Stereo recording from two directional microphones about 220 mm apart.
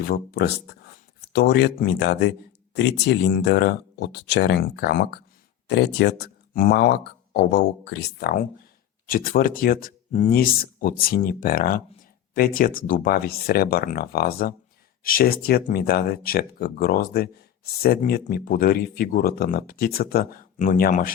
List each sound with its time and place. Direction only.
0.0 s speech: 40° left (ahead or behind)